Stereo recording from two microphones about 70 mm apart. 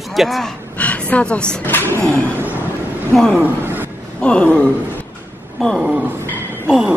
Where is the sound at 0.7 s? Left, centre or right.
Left.